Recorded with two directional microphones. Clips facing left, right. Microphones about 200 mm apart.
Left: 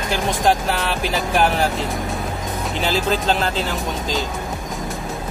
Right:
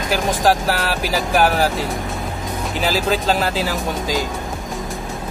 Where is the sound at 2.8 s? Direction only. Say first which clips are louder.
Right 1 dB; 5° right (ahead or behind).